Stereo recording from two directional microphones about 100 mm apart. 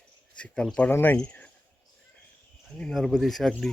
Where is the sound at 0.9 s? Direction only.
20° left (ahead or behind).